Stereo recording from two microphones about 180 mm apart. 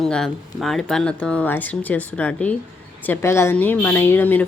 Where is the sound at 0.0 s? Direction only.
Centre (ahead or behind).